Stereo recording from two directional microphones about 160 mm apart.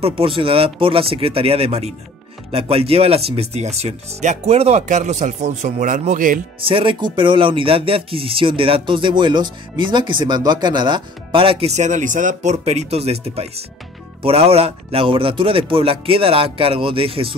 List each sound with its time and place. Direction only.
0.0 s speech: 35° right (ahead or behind); by 6.4 s 55° right (ahead or behind)
6.6 s speech: 35° right (ahead or behind)